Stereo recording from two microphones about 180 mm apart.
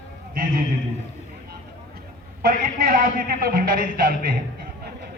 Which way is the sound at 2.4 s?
50° right (ahead or behind).